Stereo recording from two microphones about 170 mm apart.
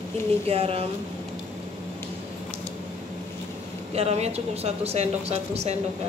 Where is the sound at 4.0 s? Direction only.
40° right (ahead or behind).